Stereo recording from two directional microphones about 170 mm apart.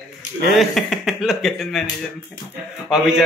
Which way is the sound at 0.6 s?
Centre (ahead or behind).